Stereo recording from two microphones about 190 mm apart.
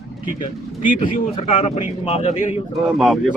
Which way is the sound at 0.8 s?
45° left (ahead or behind).